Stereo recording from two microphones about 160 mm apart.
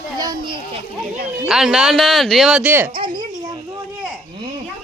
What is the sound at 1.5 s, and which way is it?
Speech, 5° right (ahead or behind).